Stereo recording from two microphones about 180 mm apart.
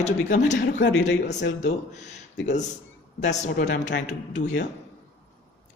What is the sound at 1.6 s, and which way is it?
Speech, 40° left (ahead or behind).